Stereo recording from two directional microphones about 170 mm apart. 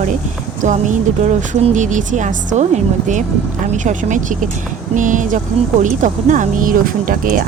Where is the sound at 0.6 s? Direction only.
45° right (ahead or behind).